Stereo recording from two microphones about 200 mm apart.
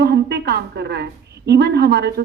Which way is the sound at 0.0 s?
55° right (ahead or behind).